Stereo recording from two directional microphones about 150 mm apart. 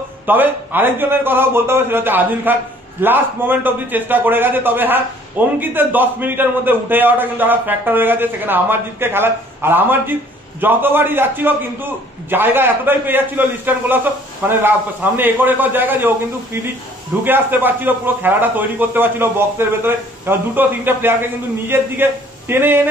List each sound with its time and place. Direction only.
0.3 s a man's voice: 15° right (ahead or behind)
17.2 s a man's voice: 15° right (ahead or behind)